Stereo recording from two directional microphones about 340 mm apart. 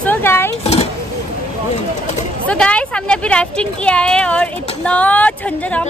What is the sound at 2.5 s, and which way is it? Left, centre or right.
Speech, centre.